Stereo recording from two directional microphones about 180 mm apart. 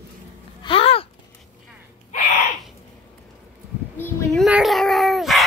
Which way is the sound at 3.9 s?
10° left (ahead or behind).